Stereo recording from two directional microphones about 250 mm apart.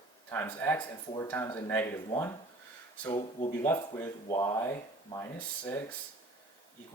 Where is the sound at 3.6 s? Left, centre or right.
Centre.